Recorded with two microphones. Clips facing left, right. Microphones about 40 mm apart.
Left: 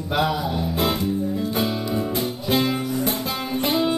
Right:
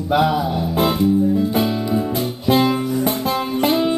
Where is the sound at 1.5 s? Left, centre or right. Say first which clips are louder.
Right 5 dB; centre.